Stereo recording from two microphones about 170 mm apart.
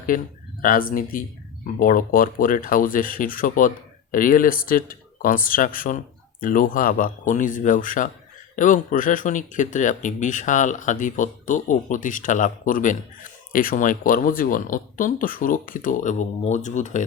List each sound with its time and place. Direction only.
0.6 s speech: 55° left (ahead or behind)